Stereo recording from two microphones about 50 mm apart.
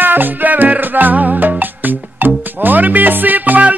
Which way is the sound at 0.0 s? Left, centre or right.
Right.